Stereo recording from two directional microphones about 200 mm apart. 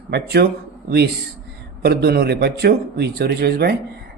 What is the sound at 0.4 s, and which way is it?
Speech, 50° right (ahead or behind).